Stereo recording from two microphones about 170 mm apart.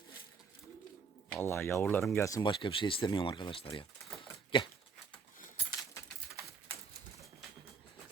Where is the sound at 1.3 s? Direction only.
15° left (ahead or behind); by 3.8 s 30° left (ahead or behind).